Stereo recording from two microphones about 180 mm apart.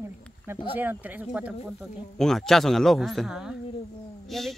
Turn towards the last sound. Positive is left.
turn(degrees=0)  # may be behind; listen again after turning